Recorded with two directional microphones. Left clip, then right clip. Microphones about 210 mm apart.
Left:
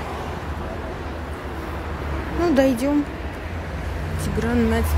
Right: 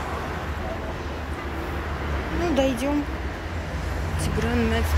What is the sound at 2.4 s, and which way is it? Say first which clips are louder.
Speech: left 5 dB; 30° left (ahead or behind).